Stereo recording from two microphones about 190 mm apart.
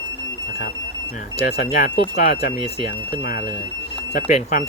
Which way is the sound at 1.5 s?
60° left (ahead or behind).